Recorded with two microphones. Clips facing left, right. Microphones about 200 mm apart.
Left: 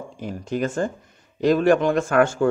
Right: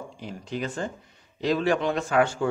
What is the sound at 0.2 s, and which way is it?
Speech, 50° left (ahead or behind).